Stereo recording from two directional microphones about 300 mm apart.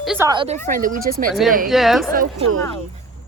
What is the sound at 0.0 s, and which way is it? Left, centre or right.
Speech, centre.